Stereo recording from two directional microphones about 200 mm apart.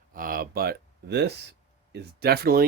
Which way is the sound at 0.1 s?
45° right (ahead or behind).